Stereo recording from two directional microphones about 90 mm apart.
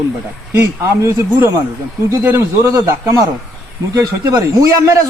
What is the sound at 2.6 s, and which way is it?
A man's voice, 35° right (ahead or behind).